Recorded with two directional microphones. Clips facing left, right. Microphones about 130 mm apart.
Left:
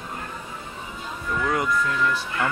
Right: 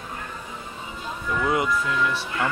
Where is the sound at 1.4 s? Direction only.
10° right (ahead or behind).